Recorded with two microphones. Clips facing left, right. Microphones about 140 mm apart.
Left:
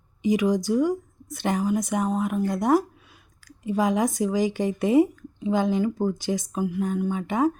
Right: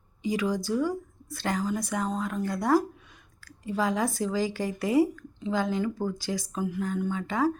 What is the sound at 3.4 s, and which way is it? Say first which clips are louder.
Speech: left 4 dB; 20° left (ahead or behind).